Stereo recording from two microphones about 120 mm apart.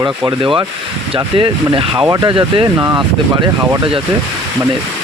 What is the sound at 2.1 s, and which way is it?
Speech, 35° right (ahead or behind).